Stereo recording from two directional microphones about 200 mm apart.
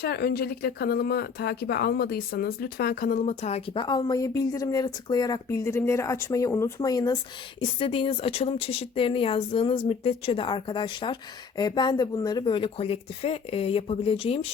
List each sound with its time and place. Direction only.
0.0 s speech: 50° left (ahead or behind); by 14.5 s 30° left (ahead or behind)